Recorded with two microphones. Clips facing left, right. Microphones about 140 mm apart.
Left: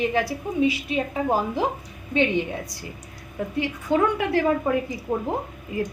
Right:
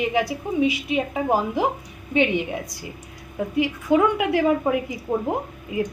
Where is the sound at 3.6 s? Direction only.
15° right (ahead or behind).